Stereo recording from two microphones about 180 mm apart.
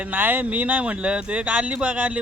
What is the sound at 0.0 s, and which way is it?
A man's voice, 10° right (ahead or behind).